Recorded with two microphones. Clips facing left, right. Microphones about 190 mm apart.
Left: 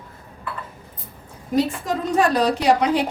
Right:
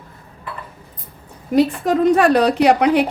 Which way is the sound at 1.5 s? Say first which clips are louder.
Right 6 dB; 65° right (ahead or behind).